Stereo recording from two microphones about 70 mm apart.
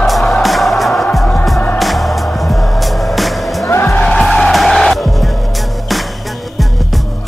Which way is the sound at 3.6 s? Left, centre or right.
Left.